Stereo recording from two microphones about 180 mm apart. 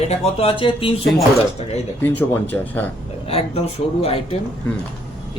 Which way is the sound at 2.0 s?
10° left (ahead or behind).